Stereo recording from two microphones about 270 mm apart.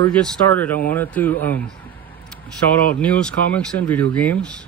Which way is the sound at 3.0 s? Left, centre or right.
Centre.